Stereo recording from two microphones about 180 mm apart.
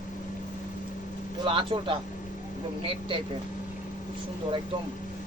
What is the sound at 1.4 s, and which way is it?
Speech, 30° right (ahead or behind).